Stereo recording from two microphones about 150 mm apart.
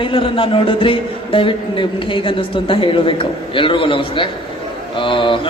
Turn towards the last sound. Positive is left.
turn(degrees=35)  # may be behind; listen again after turning